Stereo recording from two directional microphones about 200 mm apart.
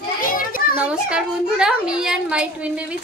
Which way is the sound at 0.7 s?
5° right (ahead or behind).